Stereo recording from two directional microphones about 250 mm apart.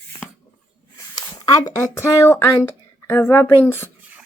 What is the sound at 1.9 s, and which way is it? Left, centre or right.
A woman's voice, centre.